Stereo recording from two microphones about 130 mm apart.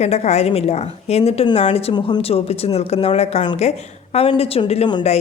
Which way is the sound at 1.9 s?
35° left (ahead or behind).